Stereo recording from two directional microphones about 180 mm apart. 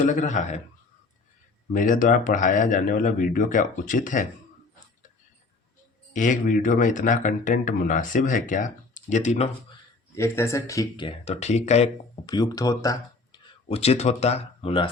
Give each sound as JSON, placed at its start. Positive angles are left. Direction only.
{"t": 0.0, "sound": "a man's voice", "side_deg": 45}
{"t": 1.7, "sound": "a man's voice", "side_deg": 50}
{"t": 6.1, "sound": "a man's voice", "side_deg": 45}
{"t": 10.2, "sound": "speech", "side_deg": 15}
{"t": 11.3, "sound": "speech", "side_deg": 40}
{"t": 12.2, "sound": "speech", "side_deg": 20}
{"t": 13.7, "sound": "speech", "side_deg": 35}